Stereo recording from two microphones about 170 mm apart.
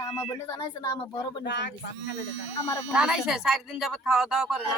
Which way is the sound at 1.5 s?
90° left.